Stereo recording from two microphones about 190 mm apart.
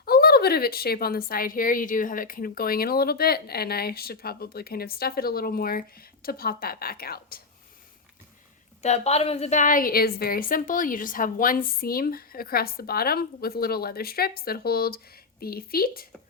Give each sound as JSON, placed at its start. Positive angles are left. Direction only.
{"t": 0.0, "sound": "a woman's voice", "side_deg": 55}
{"t": 8.8, "sound": "a woman's voice", "side_deg": 35}